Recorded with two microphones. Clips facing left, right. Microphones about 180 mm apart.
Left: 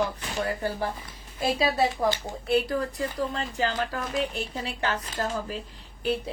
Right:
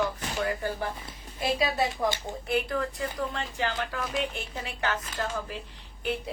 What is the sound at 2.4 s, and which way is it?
Speech, 35° left (ahead or behind).